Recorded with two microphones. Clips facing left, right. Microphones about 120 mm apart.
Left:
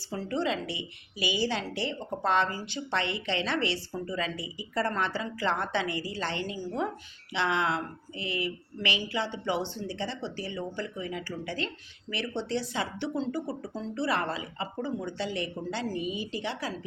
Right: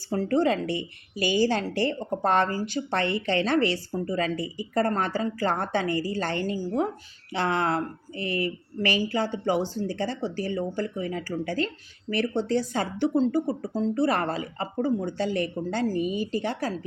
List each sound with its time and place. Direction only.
0.1 s a woman's voice: 45° right (ahead or behind)